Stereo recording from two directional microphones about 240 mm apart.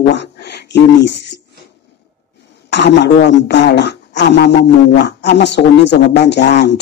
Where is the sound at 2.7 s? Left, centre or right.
Left.